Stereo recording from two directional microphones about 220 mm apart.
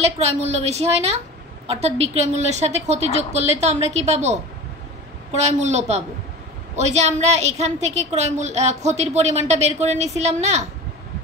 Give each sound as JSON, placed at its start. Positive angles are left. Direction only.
{"t": 0.0, "sound": "a woman's voice", "side_deg": -30}